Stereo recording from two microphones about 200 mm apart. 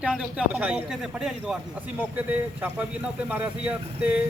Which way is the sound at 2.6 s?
5° right (ahead or behind).